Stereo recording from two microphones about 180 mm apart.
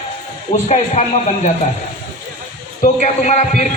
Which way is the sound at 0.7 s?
40° left (ahead or behind).